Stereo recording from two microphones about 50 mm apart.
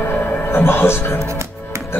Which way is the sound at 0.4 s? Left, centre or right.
Left.